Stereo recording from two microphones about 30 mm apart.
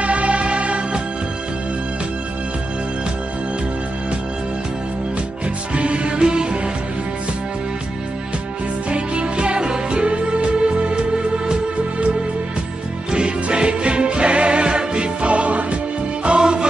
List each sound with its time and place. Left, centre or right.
0.0 s music: right
5.8 s music: right
8.9 s music: right
13.1 s music: right
16.3 s music: right